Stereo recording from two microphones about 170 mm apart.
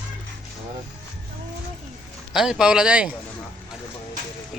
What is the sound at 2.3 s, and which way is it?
Speech, 5° right (ahead or behind).